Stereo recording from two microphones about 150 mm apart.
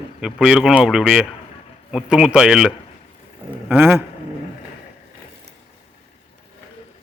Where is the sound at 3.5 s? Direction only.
15° right (ahead or behind).